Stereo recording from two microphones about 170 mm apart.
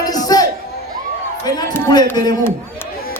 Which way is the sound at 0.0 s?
20° left (ahead or behind).